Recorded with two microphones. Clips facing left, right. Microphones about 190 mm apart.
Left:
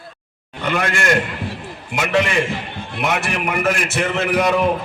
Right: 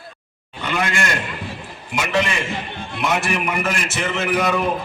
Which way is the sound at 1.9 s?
55° left (ahead or behind).